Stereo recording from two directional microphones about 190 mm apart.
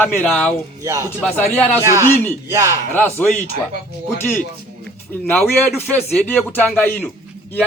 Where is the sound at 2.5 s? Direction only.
15° right (ahead or behind).